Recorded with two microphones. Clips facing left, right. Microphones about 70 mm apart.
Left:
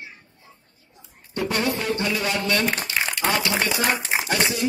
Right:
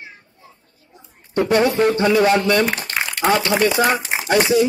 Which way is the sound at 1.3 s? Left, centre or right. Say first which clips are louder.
Right 8 dB; right.